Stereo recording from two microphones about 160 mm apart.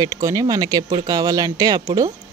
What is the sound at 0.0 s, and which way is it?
Speech, 20° right (ahead or behind).